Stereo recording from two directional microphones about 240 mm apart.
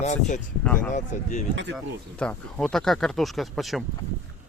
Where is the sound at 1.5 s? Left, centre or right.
Right.